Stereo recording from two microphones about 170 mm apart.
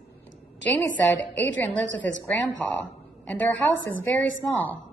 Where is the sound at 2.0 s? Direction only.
10° left (ahead or behind).